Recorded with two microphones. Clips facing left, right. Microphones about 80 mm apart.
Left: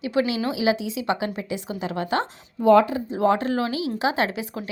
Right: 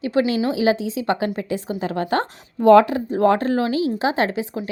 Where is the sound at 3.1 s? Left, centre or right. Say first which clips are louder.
Right 4 dB; right.